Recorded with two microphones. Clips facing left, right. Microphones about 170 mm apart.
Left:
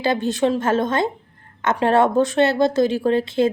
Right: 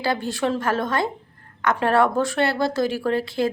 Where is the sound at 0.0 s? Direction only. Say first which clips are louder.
Left 4 dB; 20° left (ahead or behind).